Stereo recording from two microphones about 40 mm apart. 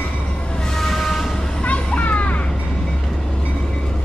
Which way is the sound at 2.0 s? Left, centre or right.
Left.